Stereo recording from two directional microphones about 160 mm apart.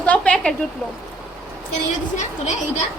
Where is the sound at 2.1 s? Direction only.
50° left (ahead or behind).